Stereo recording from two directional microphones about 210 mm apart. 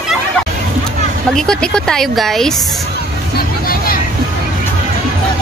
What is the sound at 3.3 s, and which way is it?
Music, 45° left (ahead or behind).